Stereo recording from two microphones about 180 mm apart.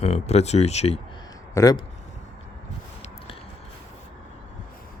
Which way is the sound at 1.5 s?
20° left (ahead or behind).